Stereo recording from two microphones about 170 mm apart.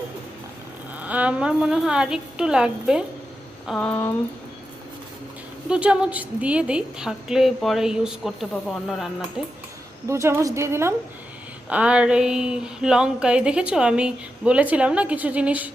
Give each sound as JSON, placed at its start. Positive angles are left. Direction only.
{"t": 0.9, "sound": "a woman's voice", "side_deg": -10}
{"t": 3.7, "sound": "a woman's voice", "side_deg": 5}
{"t": 5.6, "sound": "a woman's voice", "side_deg": -5}
{"t": 10.1, "sound": "a sound", "side_deg": -15}